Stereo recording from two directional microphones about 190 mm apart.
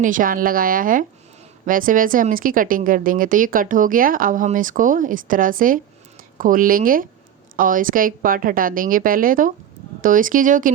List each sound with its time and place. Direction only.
0.0 s speech: 45° right (ahead or behind)